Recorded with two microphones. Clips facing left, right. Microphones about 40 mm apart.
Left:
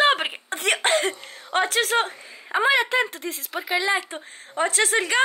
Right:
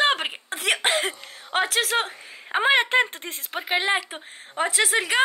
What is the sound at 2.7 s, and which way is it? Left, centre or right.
Speech, right.